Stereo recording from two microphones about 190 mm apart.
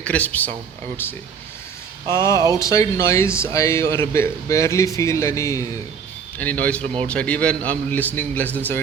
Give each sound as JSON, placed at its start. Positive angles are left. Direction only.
{"t": 0.0, "sound": "a man's voice", "side_deg": 5}
{"t": 2.0, "sound": "a man's voice", "side_deg": 15}
{"t": 6.8, "sound": "speech", "side_deg": -35}
{"t": 7.1, "sound": "a man's voice", "side_deg": 5}